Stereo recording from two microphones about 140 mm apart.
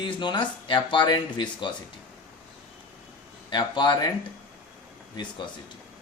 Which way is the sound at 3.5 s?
35° left (ahead or behind).